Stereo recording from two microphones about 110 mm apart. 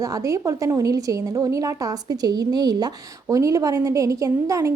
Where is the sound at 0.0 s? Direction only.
30° right (ahead or behind).